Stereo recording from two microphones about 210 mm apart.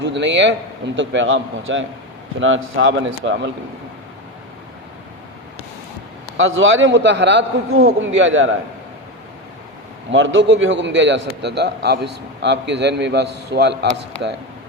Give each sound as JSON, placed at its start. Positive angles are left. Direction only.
{"t": 0.0, "sound": "a man's voice", "side_deg": -60}
{"t": 6.3, "sound": "a man's voice", "side_deg": -65}
{"t": 10.1, "sound": "a man's voice", "side_deg": -65}